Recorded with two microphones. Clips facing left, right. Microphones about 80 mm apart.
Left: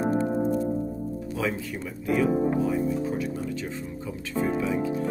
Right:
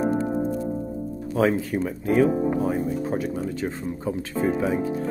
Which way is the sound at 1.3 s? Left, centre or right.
Right.